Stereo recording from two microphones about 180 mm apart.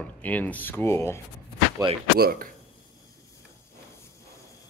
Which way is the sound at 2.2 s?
60° right (ahead or behind).